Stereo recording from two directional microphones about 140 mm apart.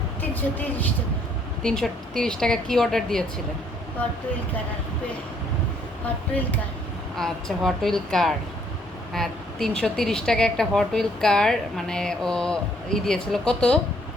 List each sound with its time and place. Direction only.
0.2 s a woman's voice: 15° left (ahead or behind)
7.2 s a woman's voice: 5° left (ahead or behind)